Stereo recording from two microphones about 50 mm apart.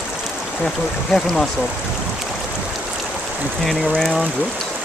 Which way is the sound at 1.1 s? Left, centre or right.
Centre.